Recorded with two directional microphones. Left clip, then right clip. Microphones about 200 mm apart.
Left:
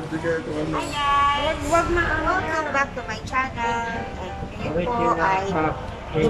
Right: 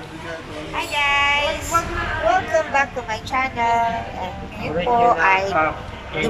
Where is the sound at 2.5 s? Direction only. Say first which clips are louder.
Right 4 dB; 20° right (ahead or behind).